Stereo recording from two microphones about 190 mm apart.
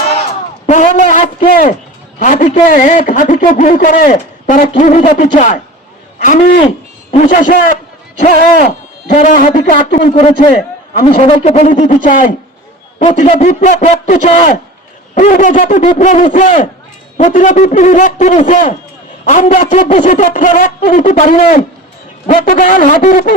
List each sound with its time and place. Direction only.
0.7 s a sound: 40° left (ahead or behind)
2.1 s a man's voice: 40° left (ahead or behind)
10.0 s a man's voice: 30° left (ahead or behind)